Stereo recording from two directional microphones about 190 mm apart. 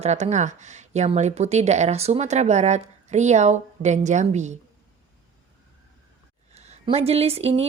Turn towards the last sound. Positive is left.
turn(degrees=-35)  # may be behind; listen again after turning